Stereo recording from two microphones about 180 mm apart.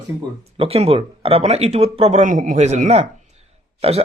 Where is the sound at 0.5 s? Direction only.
30° right (ahead or behind).